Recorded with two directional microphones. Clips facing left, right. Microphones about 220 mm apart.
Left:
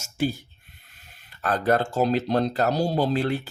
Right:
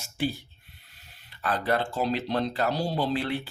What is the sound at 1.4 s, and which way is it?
Speech, 45° left (ahead or behind).